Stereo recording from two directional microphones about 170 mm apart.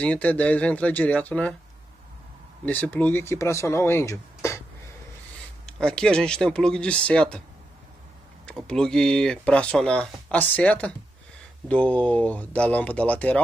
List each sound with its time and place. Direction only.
0.0 s speech: 10° left (ahead or behind)
2.6 s speech: 10° left (ahead or behind)
5.7 s speech: 5° left (ahead or behind)
8.5 s speech: 5° left (ahead or behind)